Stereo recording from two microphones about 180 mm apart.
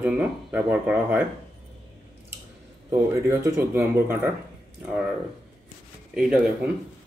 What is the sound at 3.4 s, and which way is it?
Speech, 10° right (ahead or behind).